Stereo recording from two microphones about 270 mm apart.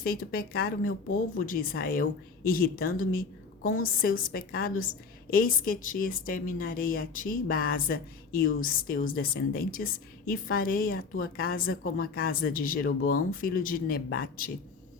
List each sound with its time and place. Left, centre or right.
0.0 s a woman's voice: left